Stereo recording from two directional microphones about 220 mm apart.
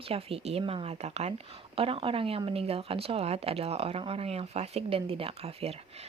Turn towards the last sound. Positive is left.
turn(degrees=-25)  # may be behind; listen again after turning